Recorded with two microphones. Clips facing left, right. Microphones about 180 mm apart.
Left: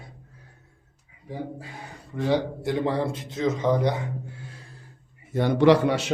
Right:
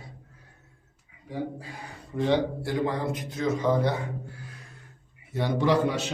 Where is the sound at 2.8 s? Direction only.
30° left (ahead or behind).